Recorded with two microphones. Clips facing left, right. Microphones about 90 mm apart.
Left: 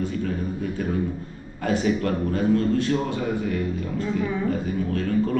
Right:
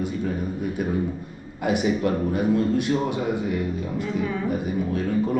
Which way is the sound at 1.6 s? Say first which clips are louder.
Right 1 dB; 15° right (ahead or behind).